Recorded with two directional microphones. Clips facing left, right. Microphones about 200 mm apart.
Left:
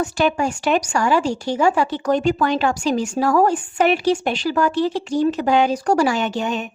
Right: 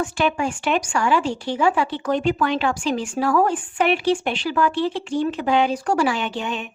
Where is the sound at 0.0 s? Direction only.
40° left (ahead or behind).